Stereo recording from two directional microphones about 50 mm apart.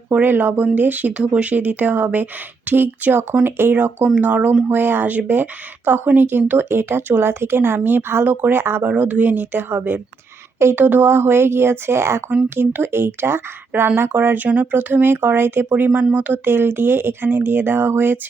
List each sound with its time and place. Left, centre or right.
0.1 s speech: right
1.1 s a woman's voice: right
4.2 s speech: right
4.7 s a woman's voice: right
8.8 s speech: right
10.6 s a woman's voice: right
10.8 s a woman's voice: right
12.5 s a woman's voice: right
16.4 s a woman's voice: right